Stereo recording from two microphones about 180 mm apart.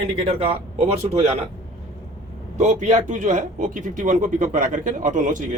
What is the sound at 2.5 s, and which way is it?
Speech, 40° right (ahead or behind).